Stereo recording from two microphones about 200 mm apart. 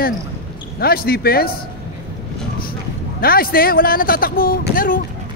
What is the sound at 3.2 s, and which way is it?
A man's voice, 45° left (ahead or behind).